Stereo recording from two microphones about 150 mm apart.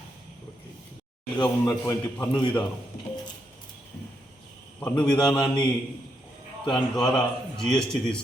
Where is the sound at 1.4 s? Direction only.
25° left (ahead or behind).